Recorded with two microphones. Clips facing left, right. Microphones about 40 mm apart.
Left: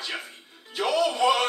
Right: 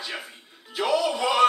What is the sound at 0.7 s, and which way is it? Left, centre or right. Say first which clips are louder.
Music: even; centre.